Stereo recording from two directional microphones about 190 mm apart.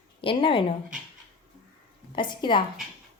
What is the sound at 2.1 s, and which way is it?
Speech, 25° left (ahead or behind).